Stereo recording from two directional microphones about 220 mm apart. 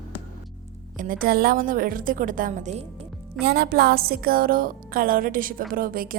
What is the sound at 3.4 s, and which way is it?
A woman's voice, 45° right (ahead or behind).